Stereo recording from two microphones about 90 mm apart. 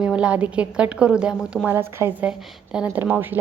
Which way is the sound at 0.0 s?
10° right (ahead or behind).